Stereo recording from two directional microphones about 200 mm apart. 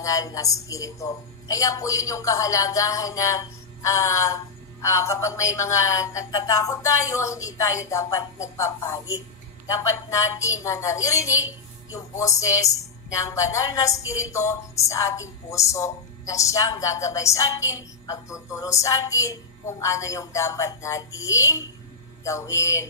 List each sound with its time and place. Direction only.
0.0 s speech: 15° left (ahead or behind)